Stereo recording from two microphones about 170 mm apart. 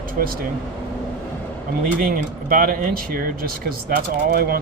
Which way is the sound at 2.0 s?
55° right (ahead or behind).